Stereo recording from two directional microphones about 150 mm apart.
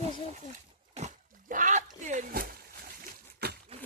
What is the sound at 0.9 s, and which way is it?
Splash, 55° right (ahead or behind).